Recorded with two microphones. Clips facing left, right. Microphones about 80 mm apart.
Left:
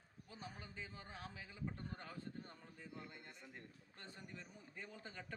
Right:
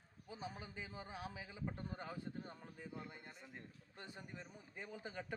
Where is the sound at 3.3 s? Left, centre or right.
Centre.